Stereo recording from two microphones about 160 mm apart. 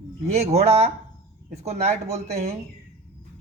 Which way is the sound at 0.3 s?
40° right (ahead or behind).